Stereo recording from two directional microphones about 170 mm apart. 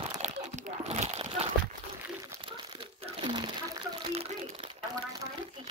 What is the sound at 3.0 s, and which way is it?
Crumpling, 30° right (ahead or behind).